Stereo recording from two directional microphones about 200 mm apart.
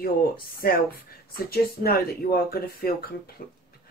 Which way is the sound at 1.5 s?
50° left (ahead or behind).